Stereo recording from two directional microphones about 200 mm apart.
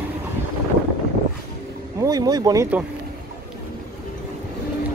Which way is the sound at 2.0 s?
20° right (ahead or behind).